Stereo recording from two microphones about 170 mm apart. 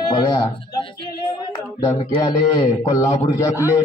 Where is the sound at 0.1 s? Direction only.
20° left (ahead or behind).